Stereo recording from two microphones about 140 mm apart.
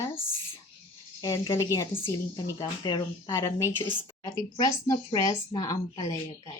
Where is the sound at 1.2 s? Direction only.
20° left (ahead or behind).